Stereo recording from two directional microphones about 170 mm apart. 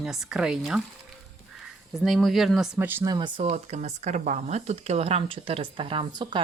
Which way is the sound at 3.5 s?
45° right (ahead or behind).